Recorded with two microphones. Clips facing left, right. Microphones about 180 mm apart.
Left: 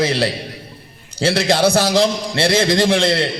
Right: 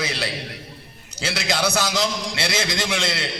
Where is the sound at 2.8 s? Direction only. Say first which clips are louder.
Left 10 dB; 30° left (ahead or behind).